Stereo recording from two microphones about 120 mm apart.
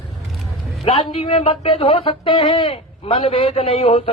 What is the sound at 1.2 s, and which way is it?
Speech, 50° left (ahead or behind).